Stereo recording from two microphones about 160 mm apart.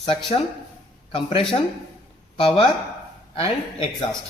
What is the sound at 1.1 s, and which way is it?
Speech, 35° left (ahead or behind).